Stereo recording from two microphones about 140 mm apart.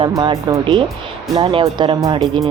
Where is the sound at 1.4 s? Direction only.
40° right (ahead or behind).